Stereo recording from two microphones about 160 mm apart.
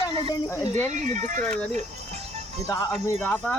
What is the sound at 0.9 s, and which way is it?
Speech, 50° right (ahead or behind).